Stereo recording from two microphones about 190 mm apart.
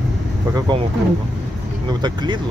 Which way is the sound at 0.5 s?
25° right (ahead or behind).